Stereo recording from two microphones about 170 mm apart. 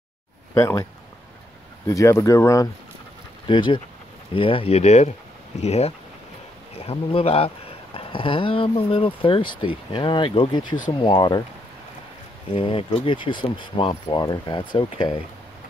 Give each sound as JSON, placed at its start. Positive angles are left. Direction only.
{"t": 0.6, "sound": "speech", "side_deg": 20}
{"t": 1.9, "sound": "speech", "side_deg": 20}
{"t": 12.5, "sound": "speech", "side_deg": 30}